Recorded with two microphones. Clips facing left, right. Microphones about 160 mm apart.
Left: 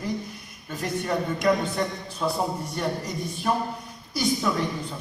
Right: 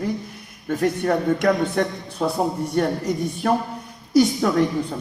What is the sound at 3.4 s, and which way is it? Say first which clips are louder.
A man's voice: right 4 dB; 65° right (ahead or behind).